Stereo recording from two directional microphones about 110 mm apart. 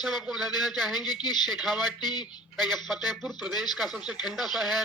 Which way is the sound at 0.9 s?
40° left (ahead or behind).